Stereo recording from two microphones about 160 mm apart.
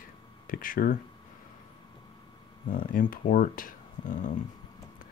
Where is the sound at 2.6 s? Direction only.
60° left (ahead or behind).